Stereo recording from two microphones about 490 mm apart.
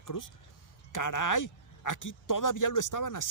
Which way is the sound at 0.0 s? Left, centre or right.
Left.